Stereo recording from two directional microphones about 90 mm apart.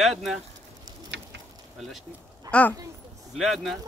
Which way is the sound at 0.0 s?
Centre (ahead or behind).